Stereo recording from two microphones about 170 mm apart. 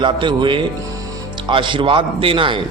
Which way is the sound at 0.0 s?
25° right (ahead or behind).